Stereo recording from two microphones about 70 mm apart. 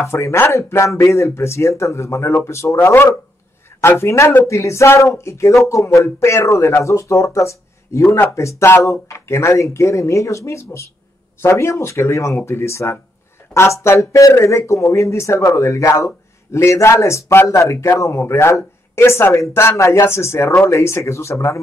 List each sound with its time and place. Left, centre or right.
0.0 s speech: left